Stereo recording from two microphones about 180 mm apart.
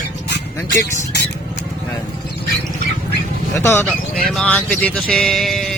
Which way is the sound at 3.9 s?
Centre (ahead or behind).